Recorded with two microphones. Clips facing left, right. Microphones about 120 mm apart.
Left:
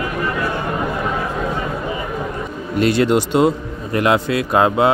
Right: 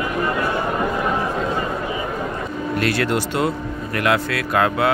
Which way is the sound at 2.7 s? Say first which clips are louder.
Left 6 dB; 20° left (ahead or behind).